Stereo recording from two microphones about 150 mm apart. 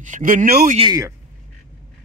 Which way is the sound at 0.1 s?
60° right (ahead or behind).